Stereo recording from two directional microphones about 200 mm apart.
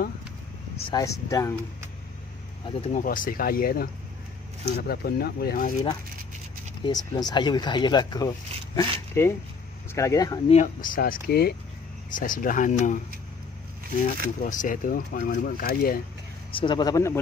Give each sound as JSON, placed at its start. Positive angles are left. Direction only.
{"t": 0.7, "sound": "speech", "side_deg": 20}
{"t": 2.6, "sound": "speech", "side_deg": 25}
{"t": 3.0, "sound": "speech", "side_deg": 40}
{"t": 6.8, "sound": "speech", "side_deg": 20}
{"t": 10.5, "sound": "speech", "side_deg": 40}
{"t": 14.4, "sound": "speech", "side_deg": 40}
{"t": 16.5, "sound": "speech", "side_deg": 20}